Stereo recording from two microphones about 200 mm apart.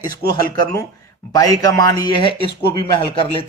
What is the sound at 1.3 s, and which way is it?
Speech, 20° left (ahead or behind).